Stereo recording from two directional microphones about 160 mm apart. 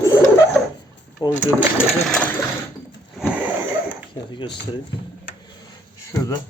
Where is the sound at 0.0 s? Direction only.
20° left (ahead or behind).